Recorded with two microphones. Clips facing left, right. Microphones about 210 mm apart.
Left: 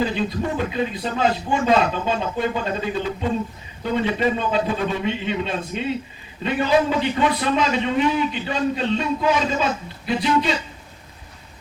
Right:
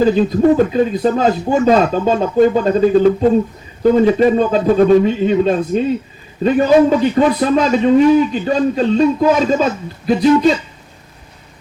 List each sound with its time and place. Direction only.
0.0 s a man's voice: 45° right (ahead or behind)